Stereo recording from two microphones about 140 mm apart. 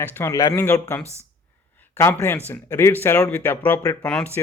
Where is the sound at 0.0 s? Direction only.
20° left (ahead or behind).